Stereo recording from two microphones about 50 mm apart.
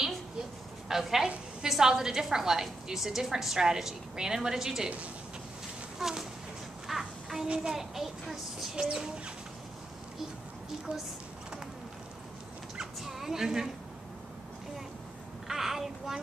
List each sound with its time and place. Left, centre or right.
0.8 s a woman's voice: centre
5.9 s a sound: centre
6.9 s child singing: centre
7.4 s a child's voice: right
7.7 s a woman's voice: centre
10.9 s a child's voice: right
12.7 s dog: centre
15.4 s child singing: centre